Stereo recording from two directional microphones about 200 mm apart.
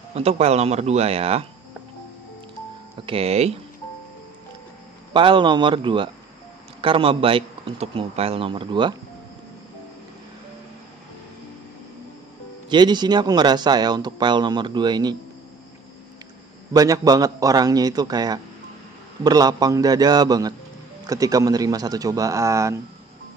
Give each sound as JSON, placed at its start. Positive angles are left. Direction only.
{"t": 0.1, "sound": "speech", "side_deg": -30}
{"t": 3.1, "sound": "speech", "side_deg": -30}
{"t": 5.1, "sound": "speech", "side_deg": -25}
{"t": 12.6, "sound": "speech", "side_deg": -20}
{"t": 16.7, "sound": "a man's voice", "side_deg": -15}